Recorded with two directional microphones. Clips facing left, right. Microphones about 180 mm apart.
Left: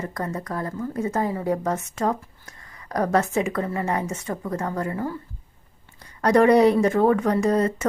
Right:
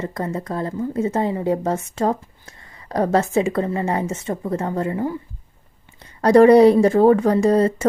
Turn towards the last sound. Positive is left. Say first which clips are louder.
# right 5 dB
turn(degrees=-30)  # may be behind; listen again after turning